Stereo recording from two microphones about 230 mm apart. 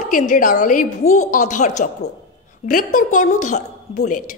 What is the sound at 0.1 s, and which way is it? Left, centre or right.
A woman's voice, left.